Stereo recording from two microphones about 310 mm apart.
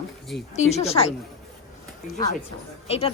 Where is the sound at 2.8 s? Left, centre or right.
Centre.